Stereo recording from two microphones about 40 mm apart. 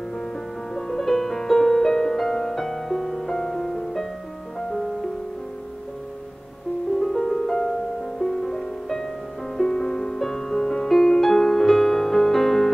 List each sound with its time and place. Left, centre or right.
0.7 s music: centre
7.0 s music: centre